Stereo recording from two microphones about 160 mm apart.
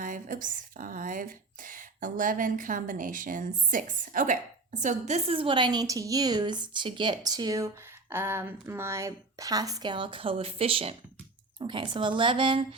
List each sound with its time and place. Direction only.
0.0 s a woman's voice: 55° right (ahead or behind); by 12.6 s 30° right (ahead or behind)